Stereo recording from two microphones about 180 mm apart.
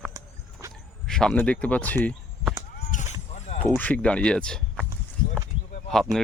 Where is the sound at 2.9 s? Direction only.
45° left (ahead or behind).